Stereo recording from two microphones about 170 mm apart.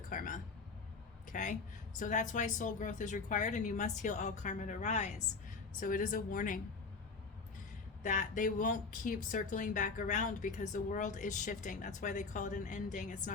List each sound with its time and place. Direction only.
0.1 s a sound: 55° left (ahead or behind)
1.3 s a woman's voice: 50° left (ahead or behind)
8.0 s a woman's voice: 50° left (ahead or behind)